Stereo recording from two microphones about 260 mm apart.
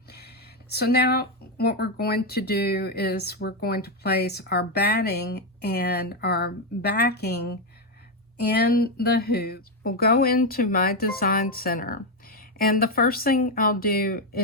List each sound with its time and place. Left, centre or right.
0.1 s speech: left